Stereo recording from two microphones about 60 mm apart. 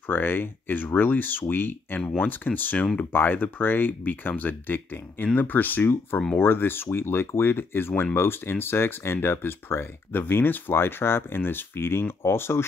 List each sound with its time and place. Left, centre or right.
0.1 s speech: left